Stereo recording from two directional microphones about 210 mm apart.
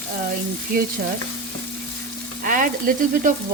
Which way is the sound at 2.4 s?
40° right (ahead or behind).